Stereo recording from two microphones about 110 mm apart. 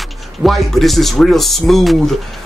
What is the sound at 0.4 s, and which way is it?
Speech, centre (ahead or behind).